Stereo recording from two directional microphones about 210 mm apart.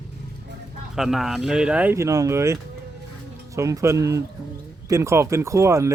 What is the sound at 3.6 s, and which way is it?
Speech, 15° right (ahead or behind).